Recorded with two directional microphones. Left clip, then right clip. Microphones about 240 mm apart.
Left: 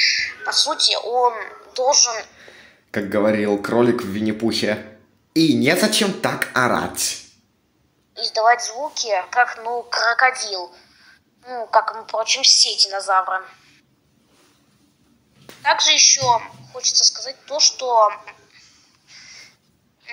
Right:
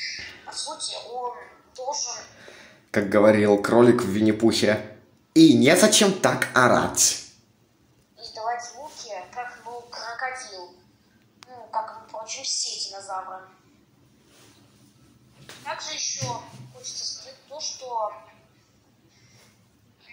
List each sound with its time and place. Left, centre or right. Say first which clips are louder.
0.0 s speech: left 15 dB; left
2.1 s speech: left 9 dB; centre
8.1 s a sound: left 14 dB; left
8.9 s a woman's voice: left 18 dB; left
11.5 s a woman's voice: left 12 dB; left
15.6 s a woman's voice: left 17 dB; left